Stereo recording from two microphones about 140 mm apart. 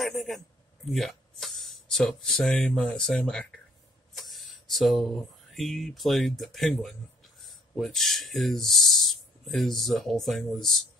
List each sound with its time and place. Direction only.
0.0 s a man's voice: centre (ahead or behind)